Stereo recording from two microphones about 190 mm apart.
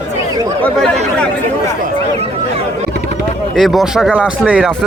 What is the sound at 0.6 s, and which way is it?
Speech, 5° left (ahead or behind).